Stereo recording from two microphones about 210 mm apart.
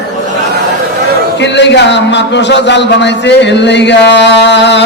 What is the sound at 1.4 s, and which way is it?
A man's voice, 55° left (ahead or behind).